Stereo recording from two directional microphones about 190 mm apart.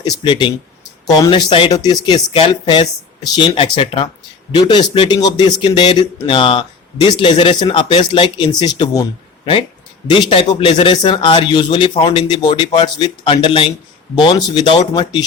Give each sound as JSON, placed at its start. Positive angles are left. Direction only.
{"t": 0.0, "sound": "speech", "side_deg": 25}
{"t": 10.1, "sound": "speech", "side_deg": 25}